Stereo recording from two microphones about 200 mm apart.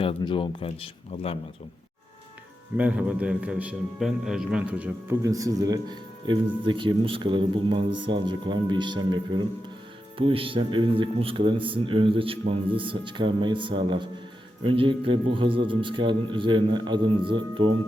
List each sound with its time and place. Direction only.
0.0 s speech: 25° left (ahead or behind)
2.7 s a man's voice: 5° right (ahead or behind); by 17.7 s 25° right (ahead or behind)